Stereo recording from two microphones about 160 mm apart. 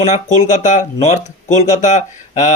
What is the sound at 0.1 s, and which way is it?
Speech, 50° left (ahead or behind).